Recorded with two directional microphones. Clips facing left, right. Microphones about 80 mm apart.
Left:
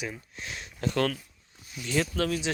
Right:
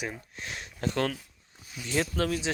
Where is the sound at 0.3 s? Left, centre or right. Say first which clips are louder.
Even; right.